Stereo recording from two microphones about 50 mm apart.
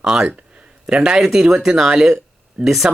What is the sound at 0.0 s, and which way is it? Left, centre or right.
Speech, centre.